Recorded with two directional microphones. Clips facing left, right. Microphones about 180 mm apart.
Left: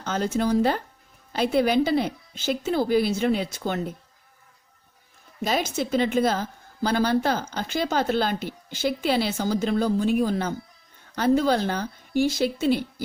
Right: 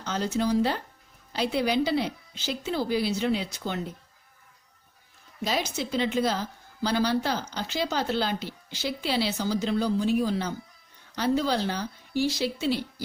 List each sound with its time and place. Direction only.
0.0 s a woman's voice: 50° left (ahead or behind)
5.4 s a woman's voice: 50° left (ahead or behind)